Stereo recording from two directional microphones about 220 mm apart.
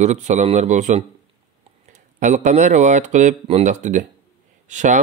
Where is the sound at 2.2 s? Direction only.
35° right (ahead or behind).